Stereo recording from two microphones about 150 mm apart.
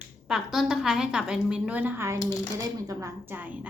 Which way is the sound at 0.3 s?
5° right (ahead or behind).